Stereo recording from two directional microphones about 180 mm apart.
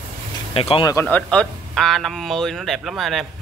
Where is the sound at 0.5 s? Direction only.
30° left (ahead or behind).